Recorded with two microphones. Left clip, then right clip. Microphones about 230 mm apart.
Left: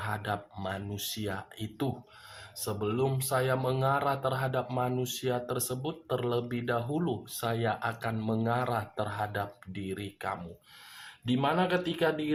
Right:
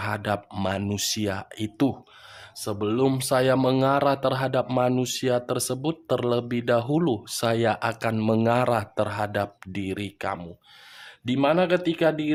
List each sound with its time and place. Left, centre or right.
0.0 s speech: right